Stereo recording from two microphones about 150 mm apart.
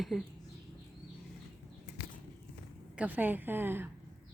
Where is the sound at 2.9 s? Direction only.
10° right (ahead or behind).